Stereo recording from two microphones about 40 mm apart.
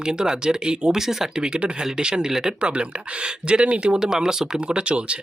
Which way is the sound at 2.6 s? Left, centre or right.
Right.